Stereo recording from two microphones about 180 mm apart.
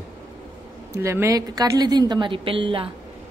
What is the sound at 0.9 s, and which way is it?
A woman's voice, 15° right (ahead or behind).